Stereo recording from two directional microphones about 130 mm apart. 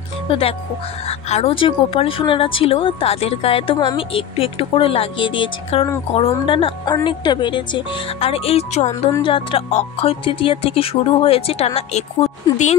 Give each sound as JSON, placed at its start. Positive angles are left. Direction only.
{"t": 0.3, "sound": "speech", "side_deg": 45}
{"t": 9.2, "sound": "speech", "side_deg": 40}
{"t": 9.7, "sound": "speech", "side_deg": 55}